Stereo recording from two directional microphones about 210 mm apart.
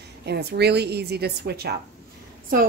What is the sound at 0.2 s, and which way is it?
A woman's voice, 50° right (ahead or behind).